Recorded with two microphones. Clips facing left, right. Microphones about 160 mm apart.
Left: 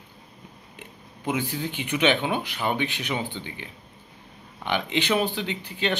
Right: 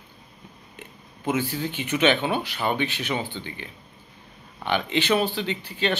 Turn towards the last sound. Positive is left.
turn(degrees=15)  # may be behind; listen again after turning